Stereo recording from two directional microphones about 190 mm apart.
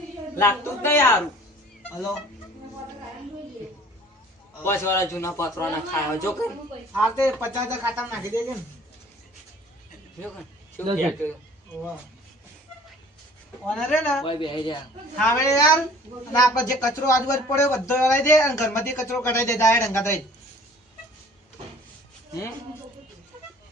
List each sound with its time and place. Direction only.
0.3 s speech: 10° left (ahead or behind)
4.6 s speech: 15° left (ahead or behind)
6.9 s speech: 5° right (ahead or behind)
10.2 s a sound: 5° left (ahead or behind)
11.0 s speech: 5° left (ahead or behind)
13.7 s a man's voice: 5° left (ahead or behind)
14.3 s speech: 25° left (ahead or behind)
15.2 s speech: 15° left (ahead or behind)